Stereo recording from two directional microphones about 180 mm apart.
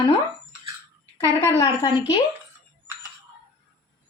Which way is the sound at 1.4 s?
15° left (ahead or behind).